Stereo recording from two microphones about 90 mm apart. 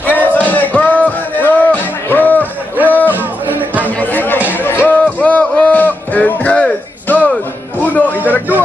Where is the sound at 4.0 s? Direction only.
20° left (ahead or behind).